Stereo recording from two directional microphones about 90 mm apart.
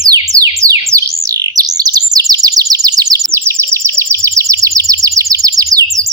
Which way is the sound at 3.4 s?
30° right (ahead or behind).